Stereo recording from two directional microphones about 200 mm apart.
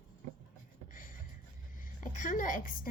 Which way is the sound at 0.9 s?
40° left (ahead or behind).